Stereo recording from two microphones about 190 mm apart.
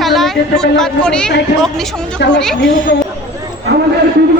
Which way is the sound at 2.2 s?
65° left (ahead or behind).